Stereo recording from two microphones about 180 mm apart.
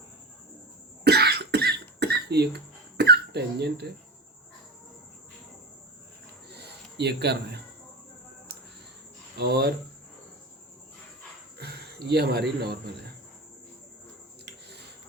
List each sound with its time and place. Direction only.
1.0 s cough: 65° right (ahead or behind)
3.0 s speech: 65° right (ahead or behind)
6.5 s a sound: 65° right (ahead or behind)
9.4 s speech: 65° right (ahead or behind)
11.5 s speech: 65° right (ahead or behind)
14.4 s a sound: 70° right (ahead or behind)